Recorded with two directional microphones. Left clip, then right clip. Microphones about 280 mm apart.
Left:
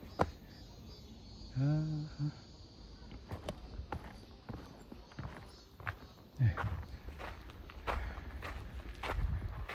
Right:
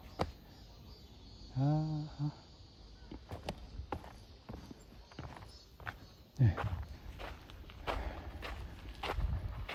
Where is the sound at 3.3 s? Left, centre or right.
Centre.